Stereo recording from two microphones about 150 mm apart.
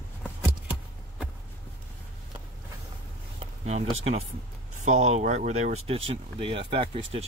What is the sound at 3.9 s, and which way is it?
Speech, 45° right (ahead or behind).